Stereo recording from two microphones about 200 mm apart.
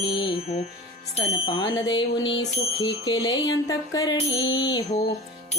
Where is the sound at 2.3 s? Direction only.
80° left.